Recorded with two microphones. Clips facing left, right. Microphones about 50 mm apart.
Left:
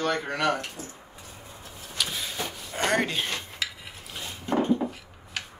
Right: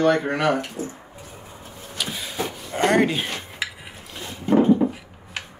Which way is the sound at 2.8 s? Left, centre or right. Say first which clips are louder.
Right 6 dB; centre.